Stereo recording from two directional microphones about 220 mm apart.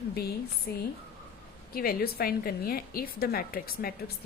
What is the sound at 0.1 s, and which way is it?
A woman's voice, 45° left (ahead or behind).